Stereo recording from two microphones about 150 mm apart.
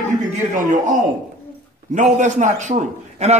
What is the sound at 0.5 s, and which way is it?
A man's voice, 60° right (ahead or behind).